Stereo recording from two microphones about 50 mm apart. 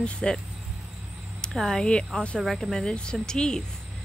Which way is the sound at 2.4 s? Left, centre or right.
Centre.